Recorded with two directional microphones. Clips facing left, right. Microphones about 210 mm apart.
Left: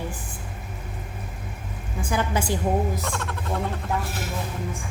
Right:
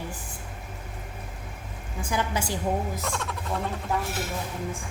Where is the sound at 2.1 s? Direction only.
50° left (ahead or behind).